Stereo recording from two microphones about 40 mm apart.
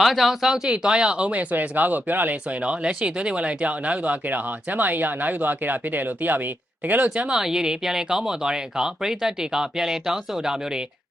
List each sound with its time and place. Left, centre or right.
0.0 s speech: centre; by 2.4 s right
2.6 s speech: right
7.3 s speech: centre